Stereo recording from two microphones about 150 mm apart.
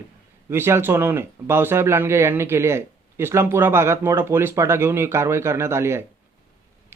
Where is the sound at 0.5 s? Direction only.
15° right (ahead or behind).